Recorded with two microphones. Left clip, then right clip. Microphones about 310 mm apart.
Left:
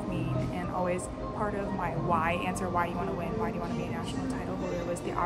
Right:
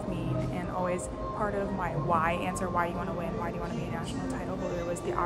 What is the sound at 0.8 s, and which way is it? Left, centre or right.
A woman's voice, centre.